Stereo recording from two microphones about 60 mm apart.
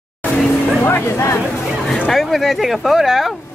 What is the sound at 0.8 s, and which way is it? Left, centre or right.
Speech, left.